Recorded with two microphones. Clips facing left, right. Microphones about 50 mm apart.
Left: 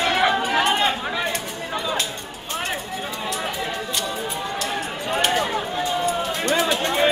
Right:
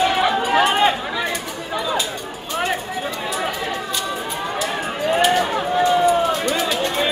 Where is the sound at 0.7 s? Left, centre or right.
Centre.